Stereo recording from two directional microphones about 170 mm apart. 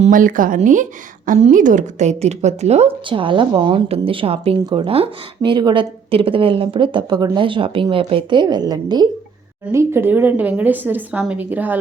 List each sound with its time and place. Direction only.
0.0 s a woman's voice: 50° right (ahead or behind); by 11.8 s 10° right (ahead or behind)